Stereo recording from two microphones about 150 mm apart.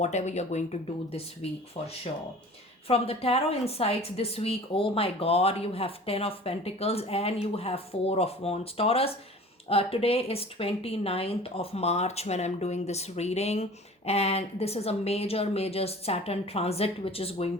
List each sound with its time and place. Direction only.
0.0 s speech: 50° left (ahead or behind)
2.8 s speech: 40° left (ahead or behind)